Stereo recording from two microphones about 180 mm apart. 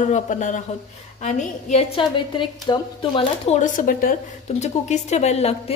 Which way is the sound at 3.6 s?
50° left (ahead or behind).